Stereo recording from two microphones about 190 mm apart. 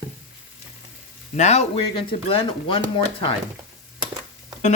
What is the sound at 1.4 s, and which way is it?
Speech, 35° left (ahead or behind).